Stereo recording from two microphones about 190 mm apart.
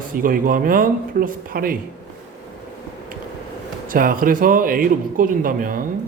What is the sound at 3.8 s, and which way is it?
Speech, 45° right (ahead or behind).